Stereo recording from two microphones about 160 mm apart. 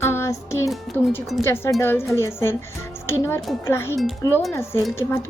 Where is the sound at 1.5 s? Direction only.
15° left (ahead or behind).